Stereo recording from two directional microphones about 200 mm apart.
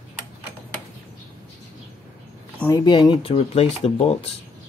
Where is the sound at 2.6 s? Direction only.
15° left (ahead or behind).